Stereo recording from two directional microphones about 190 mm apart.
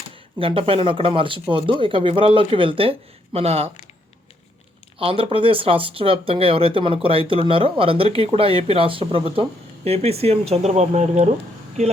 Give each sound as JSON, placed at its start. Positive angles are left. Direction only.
{"t": 0.3, "sound": "speech", "side_deg": -30}
{"t": 4.9, "sound": "speech", "side_deg": -30}